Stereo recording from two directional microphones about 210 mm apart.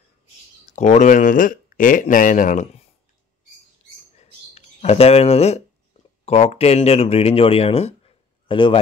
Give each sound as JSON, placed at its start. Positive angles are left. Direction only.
{"t": 0.7, "sound": "speech", "side_deg": 35}
{"t": 4.6, "sound": "a man's voice", "side_deg": 30}